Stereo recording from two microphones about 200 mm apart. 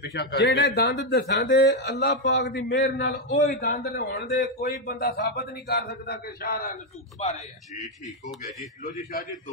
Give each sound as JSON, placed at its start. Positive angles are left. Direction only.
{"t": 0.0, "sound": "a man's voice", "side_deg": 55}
{"t": 3.4, "sound": "a man's voice", "side_deg": 50}